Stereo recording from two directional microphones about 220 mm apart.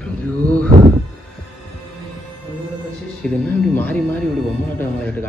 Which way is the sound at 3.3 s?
5° left (ahead or behind).